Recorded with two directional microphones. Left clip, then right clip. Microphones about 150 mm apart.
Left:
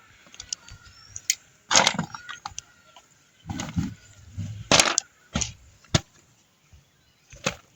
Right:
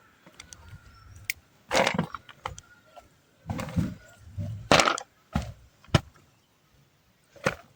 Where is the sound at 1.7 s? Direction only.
25° right (ahead or behind).